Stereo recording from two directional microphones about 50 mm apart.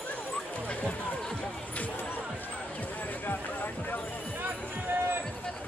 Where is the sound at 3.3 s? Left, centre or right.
Left.